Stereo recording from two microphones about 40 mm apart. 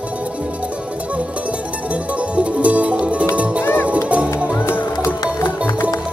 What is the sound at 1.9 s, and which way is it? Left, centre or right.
Music, right.